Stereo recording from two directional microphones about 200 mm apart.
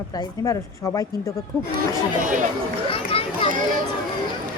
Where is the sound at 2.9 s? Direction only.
25° left (ahead or behind).